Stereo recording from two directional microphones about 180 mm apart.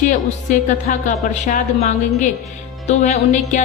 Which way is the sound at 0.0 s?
45° left (ahead or behind).